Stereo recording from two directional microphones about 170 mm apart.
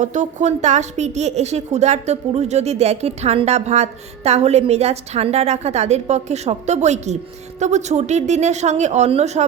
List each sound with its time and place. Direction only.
0.0 s a woman's voice: 45° right (ahead or behind)